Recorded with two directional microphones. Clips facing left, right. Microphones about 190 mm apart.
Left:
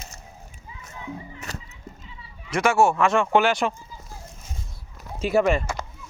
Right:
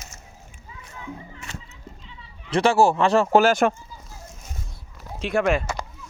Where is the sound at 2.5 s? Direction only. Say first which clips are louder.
Right 2 dB; 30° right (ahead or behind).